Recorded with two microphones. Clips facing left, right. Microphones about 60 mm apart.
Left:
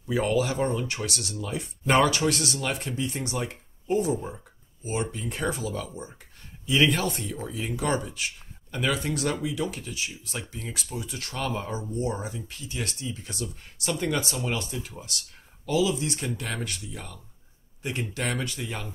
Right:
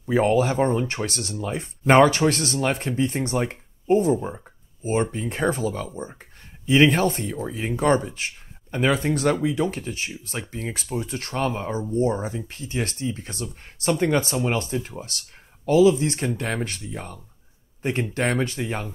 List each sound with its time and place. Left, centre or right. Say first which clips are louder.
0.0 s speech: right 5 dB; right